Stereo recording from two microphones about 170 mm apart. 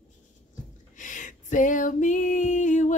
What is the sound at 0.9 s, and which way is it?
A woman's voice, 50° left (ahead or behind).